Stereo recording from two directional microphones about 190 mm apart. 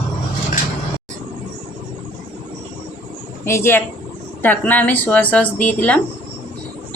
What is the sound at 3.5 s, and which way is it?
Speech, 15° left (ahead or behind).